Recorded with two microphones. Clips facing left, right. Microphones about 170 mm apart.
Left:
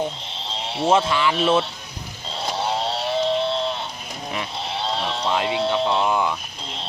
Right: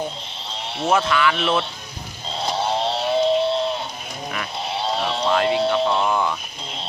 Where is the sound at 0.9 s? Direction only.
30° left (ahead or behind).